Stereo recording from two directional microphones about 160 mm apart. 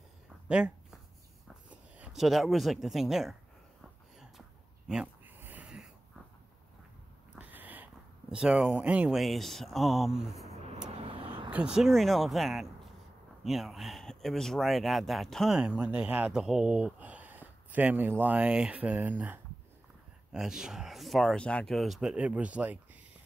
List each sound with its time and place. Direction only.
0.5 s speech: 5° right (ahead or behind)
4.8 s a sound: 5° right (ahead or behind)
7.3 s speech: 10° right (ahead or behind)
11.0 s vehicle: 35° right (ahead or behind)
11.5 s speech: 5° right (ahead or behind)